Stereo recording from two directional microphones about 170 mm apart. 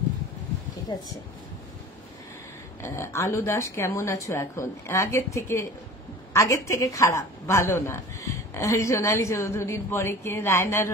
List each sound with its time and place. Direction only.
0.9 s speech: 25° left (ahead or behind)
2.8 s a woman's voice: 15° left (ahead or behind)